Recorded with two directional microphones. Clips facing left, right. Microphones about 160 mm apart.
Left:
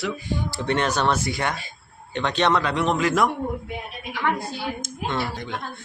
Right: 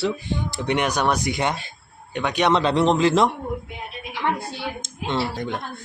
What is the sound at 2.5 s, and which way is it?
A man's voice, 30° right (ahead or behind).